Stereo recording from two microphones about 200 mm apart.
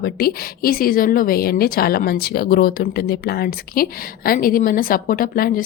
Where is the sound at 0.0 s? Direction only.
50° left (ahead or behind).